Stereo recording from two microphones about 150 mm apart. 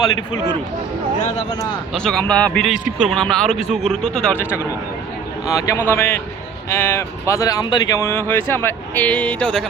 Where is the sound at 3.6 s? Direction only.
50° right (ahead or behind).